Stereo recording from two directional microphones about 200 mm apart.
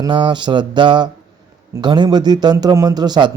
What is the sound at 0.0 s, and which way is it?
A man's voice, 25° right (ahead or behind).